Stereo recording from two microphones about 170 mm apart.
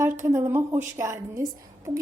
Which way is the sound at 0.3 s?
15° right (ahead or behind).